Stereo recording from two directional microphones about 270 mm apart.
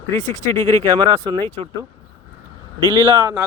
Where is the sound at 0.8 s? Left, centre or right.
Centre.